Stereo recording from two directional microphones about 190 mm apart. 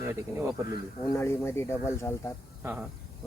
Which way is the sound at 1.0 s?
15° left (ahead or behind).